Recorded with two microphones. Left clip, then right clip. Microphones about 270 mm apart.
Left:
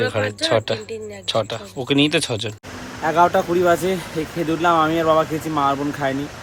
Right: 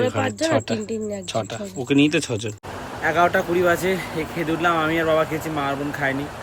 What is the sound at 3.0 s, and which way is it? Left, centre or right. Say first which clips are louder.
Speech: left 3 dB; centre.